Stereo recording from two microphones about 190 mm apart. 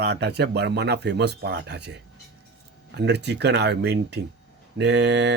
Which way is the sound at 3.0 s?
65° right (ahead or behind).